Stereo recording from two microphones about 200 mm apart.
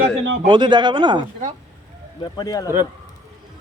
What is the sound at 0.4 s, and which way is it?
Speech, 20° right (ahead or behind).